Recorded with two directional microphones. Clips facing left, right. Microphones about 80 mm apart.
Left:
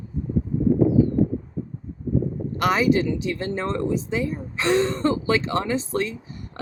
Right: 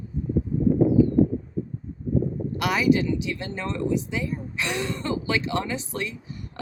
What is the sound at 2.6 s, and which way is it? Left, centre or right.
Speech, left.